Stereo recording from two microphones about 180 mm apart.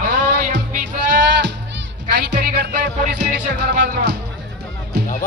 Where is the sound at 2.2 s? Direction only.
75° right (ahead or behind).